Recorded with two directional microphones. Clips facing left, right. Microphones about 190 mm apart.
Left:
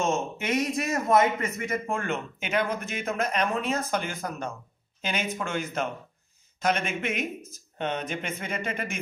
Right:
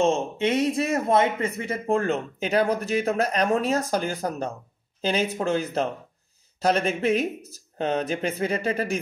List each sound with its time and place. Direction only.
0.0 s speech: 30° right (ahead or behind)